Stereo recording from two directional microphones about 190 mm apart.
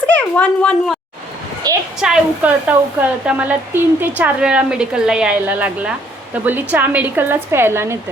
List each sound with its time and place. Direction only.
0.1 s a child's voice: 5° left (ahead or behind)
1.7 s a woman's voice: 20° right (ahead or behind)
2.0 s a woman's voice: 5° right (ahead or behind)